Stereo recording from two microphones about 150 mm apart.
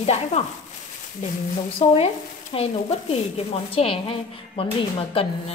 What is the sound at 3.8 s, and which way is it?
Speech, 45° left (ahead or behind).